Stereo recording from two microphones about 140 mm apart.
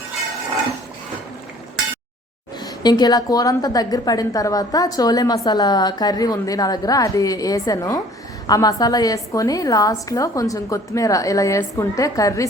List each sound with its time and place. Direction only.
2.8 s a woman's voice: 30° left (ahead or behind)